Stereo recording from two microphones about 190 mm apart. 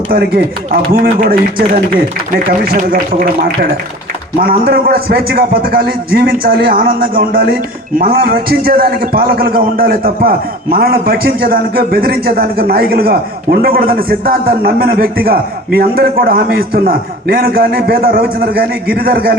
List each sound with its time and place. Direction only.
0.1 s a man's voice: 50° right (ahead or behind)